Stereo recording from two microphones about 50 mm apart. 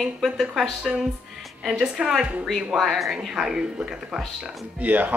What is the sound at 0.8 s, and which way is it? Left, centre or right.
Speech, centre.